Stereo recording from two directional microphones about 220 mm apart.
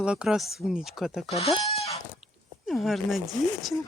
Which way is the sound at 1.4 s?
30° left (ahead or behind).